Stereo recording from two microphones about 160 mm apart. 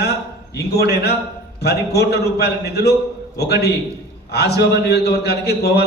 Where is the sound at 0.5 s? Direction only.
90° left.